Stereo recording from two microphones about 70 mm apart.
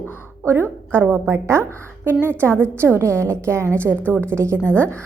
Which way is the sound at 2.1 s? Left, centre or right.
Right.